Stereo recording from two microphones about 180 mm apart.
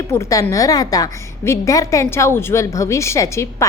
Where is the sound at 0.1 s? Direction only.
15° left (ahead or behind).